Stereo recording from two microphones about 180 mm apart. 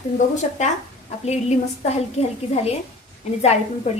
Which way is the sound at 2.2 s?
35° left (ahead or behind).